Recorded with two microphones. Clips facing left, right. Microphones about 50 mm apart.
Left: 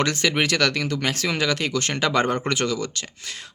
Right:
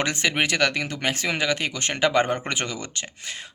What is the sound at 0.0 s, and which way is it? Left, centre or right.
Speech, right.